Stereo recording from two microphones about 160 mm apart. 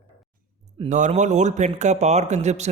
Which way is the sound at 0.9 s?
50° right (ahead or behind).